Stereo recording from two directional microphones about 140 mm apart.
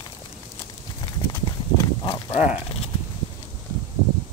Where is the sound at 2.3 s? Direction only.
45° left (ahead or behind).